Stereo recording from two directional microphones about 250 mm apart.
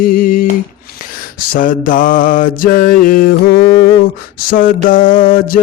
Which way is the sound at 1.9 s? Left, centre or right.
Left.